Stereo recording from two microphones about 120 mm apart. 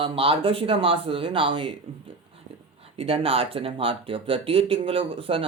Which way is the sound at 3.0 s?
55° right (ahead or behind).